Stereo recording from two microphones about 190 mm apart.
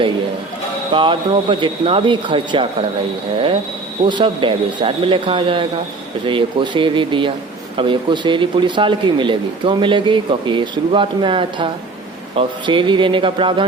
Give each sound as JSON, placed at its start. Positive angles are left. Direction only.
{"t": 0.9, "sound": "speech", "side_deg": -25}
{"t": 4.0, "sound": "speech", "side_deg": -25}